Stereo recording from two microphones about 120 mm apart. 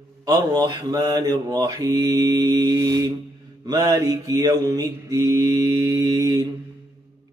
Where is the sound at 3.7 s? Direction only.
30° right (ahead or behind).